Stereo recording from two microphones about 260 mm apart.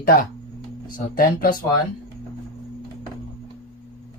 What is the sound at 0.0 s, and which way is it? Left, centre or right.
Speech, left.